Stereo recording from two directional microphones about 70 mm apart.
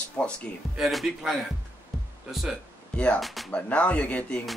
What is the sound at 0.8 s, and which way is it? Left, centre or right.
Speech, centre.